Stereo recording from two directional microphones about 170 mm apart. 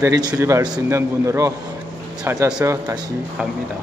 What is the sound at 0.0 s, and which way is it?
Speech, 20° right (ahead or behind).